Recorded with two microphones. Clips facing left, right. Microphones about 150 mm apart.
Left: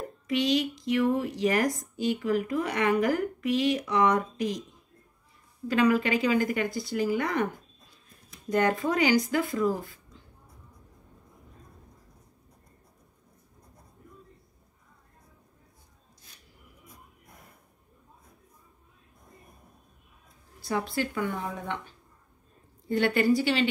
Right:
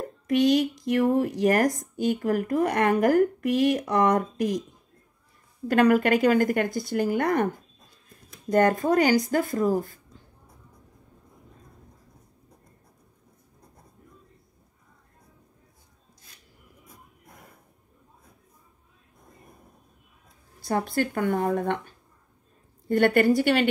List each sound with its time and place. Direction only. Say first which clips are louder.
0.3 s speech: right 5 dB; 50° right (ahead or behind)
5.7 s speech: right 4 dB; 55° right (ahead or behind)
8.5 s speech: right 5 dB; 45° right (ahead or behind)
20.6 s speech: right 4 dB; 50° right (ahead or behind)
22.8 s speech: right 4 dB; 55° right (ahead or behind)